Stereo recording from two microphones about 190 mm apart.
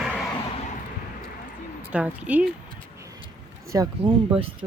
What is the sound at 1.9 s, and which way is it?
Speech, 5° right (ahead or behind).